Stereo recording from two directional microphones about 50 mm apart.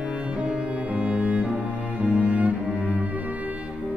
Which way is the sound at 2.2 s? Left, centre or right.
Right.